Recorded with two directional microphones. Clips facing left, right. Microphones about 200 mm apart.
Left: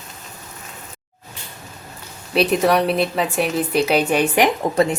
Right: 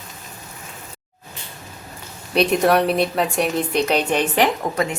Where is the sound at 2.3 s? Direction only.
Centre (ahead or behind).